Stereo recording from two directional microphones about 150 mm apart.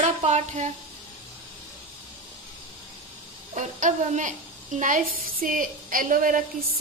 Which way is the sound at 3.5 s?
55° right (ahead or behind).